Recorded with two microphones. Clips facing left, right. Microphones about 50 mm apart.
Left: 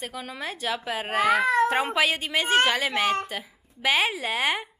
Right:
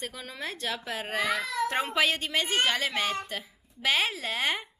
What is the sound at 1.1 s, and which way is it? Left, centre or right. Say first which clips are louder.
Speech: left 7 dB; left.